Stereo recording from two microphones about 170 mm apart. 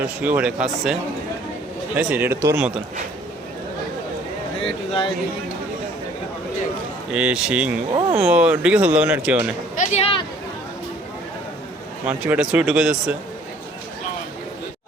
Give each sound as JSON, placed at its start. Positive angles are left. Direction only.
{"t": 0.2, "sound": "speech", "side_deg": -10}
{"t": 2.0, "sound": "speech", "side_deg": -10}
{"t": 4.6, "sound": "speech", "side_deg": 30}
{"t": 7.1, "sound": "speech", "side_deg": -5}
{"t": 7.9, "sound": "speech", "side_deg": -35}
{"t": 8.3, "sound": "speech", "side_deg": -10}
{"t": 9.7, "sound": "a sound", "side_deg": 45}
{"t": 12.0, "sound": "speech", "side_deg": -5}